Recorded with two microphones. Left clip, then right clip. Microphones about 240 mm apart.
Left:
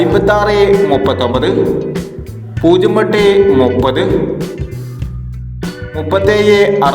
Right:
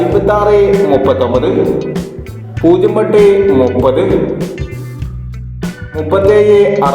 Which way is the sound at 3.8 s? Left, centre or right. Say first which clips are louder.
Right 2 dB; left.